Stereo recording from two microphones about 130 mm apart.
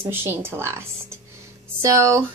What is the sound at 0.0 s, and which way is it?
A woman's voice, 15° right (ahead or behind).